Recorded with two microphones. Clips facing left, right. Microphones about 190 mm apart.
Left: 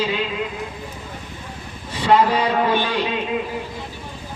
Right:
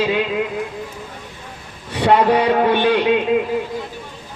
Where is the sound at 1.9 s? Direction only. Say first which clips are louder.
Right 3 dB; 65° right (ahead or behind).